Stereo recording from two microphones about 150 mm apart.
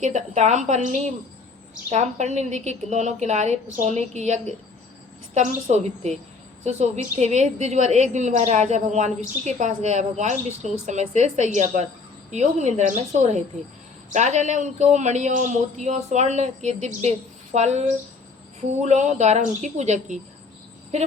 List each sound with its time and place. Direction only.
0.0 s speech: 55° right (ahead or behind)